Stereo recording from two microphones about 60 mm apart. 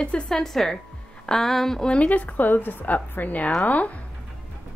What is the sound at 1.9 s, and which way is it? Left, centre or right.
A woman's voice, left.